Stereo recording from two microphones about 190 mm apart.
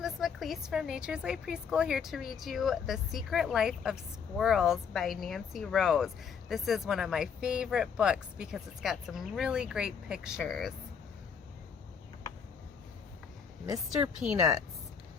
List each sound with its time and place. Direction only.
0.0 s a woman's voice: centre (ahead or behind)
14.3 s speech: 20° right (ahead or behind)